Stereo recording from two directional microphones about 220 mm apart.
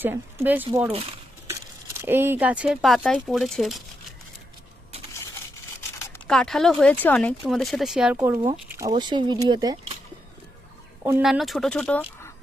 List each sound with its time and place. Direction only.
0.0 s speech: 10° right (ahead or behind)
2.0 s speech: 10° right (ahead or behind)
6.0 s speech: 5° left (ahead or behind)
8.9 s speech: 20° right (ahead or behind)
11.0 s speech: 10° right (ahead or behind)
11.3 s speech: centre (ahead or behind)